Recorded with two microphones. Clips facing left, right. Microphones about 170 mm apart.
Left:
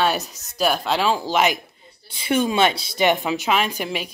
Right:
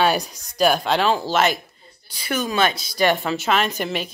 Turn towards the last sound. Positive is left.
turn(degrees=5)  # may be behind; listen again after turning